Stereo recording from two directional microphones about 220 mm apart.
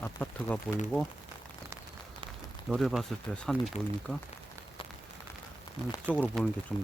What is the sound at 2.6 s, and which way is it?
Speech, centre (ahead or behind).